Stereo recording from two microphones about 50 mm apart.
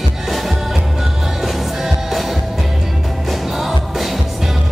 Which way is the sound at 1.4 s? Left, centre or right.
Centre.